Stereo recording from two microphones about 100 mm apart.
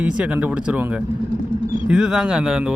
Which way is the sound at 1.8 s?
5° right (ahead or behind).